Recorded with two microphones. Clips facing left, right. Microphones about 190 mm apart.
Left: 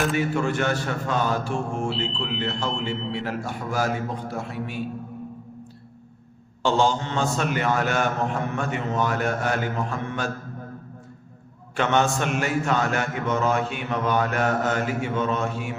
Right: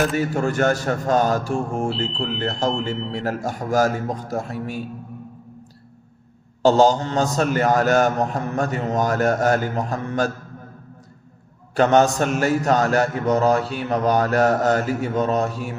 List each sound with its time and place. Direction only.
0.2 s a man's voice: 40° right (ahead or behind)
6.6 s a man's voice: 40° right (ahead or behind)
11.7 s a man's voice: 40° right (ahead or behind)